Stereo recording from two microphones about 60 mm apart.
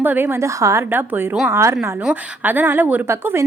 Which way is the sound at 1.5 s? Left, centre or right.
Right.